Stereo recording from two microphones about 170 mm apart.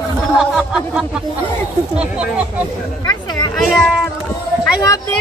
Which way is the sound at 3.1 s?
20° left (ahead or behind).